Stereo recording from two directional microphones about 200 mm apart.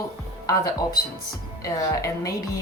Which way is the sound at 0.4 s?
20° left (ahead or behind).